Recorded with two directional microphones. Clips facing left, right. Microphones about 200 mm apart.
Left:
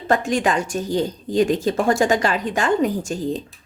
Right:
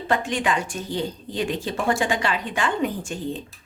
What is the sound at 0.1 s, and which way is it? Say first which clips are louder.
A woman's voice: left 4 dB; 45° left (ahead or behind).